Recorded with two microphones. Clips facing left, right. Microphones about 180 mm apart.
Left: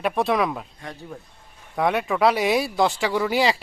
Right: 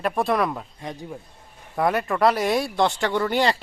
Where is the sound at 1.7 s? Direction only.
Centre (ahead or behind).